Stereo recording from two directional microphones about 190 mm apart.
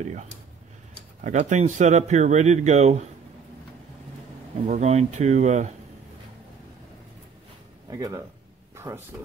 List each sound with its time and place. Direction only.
0.0 s speech: 40° right (ahead or behind)
4.6 s speech: 35° right (ahead or behind)
7.9 s speech: 20° right (ahead or behind)
8.7 s a sound: 15° right (ahead or behind)